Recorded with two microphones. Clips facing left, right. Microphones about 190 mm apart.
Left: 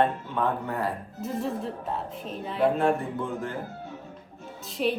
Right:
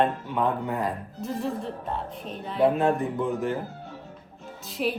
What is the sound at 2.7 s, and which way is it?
Speech, 20° right (ahead or behind).